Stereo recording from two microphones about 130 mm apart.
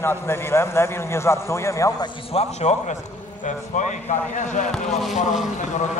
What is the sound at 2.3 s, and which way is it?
Speech, 60° left (ahead or behind).